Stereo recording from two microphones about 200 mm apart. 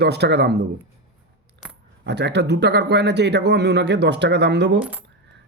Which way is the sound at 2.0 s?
60° right (ahead or behind).